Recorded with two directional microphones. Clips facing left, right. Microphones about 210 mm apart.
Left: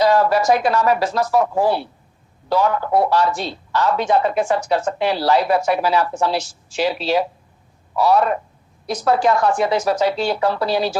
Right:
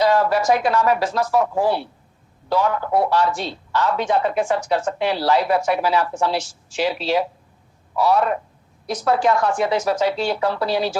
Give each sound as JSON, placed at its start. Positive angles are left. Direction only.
{"t": 0.0, "sound": "a man's voice", "side_deg": 40}